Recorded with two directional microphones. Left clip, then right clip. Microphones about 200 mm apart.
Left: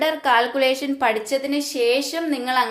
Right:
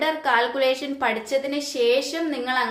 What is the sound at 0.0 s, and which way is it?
A woman's voice, 30° left (ahead or behind).